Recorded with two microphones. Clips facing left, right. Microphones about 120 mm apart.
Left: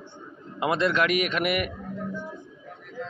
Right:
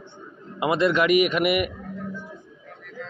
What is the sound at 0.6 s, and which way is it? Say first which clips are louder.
Speech: right 3 dB; 5° right (ahead or behind).